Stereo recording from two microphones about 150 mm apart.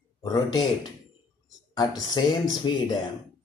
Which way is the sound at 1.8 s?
25° left (ahead or behind).